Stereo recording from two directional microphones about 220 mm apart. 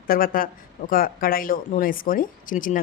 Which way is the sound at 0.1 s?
40° left (ahead or behind).